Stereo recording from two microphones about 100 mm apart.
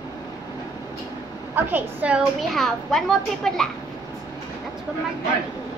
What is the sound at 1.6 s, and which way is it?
Speech, 20° right (ahead or behind).